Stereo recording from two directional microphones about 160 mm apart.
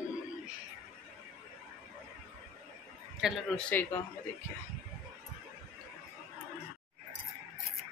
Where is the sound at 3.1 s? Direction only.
5° right (ahead or behind).